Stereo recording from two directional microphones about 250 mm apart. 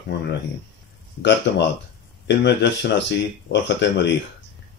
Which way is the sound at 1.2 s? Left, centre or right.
Left.